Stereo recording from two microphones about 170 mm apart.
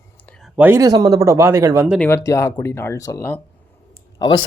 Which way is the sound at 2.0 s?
15° left (ahead or behind).